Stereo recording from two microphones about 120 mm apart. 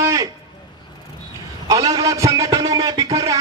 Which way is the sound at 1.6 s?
30° right (ahead or behind).